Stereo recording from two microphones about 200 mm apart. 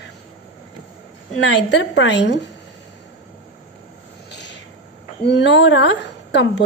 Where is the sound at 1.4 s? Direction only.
65° left (ahead or behind).